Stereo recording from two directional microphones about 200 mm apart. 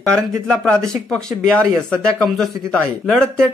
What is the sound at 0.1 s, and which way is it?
A man's voice, 5° left (ahead or behind).